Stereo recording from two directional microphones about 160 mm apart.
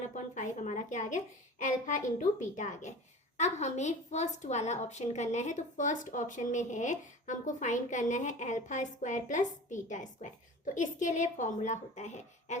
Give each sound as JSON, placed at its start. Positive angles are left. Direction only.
{"t": 0.1, "sound": "a woman's voice", "side_deg": 50}